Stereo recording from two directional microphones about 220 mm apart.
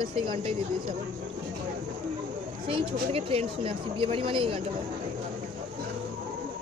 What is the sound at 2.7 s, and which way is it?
Speech, 25° right (ahead or behind).